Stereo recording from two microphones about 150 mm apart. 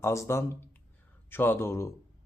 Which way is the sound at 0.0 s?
20° left (ahead or behind).